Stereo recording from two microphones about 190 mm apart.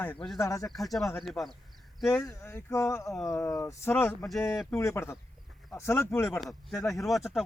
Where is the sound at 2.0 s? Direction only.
15° left (ahead or behind).